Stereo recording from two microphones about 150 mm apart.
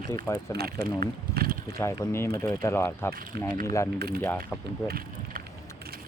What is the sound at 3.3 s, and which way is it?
Speech, 90° right.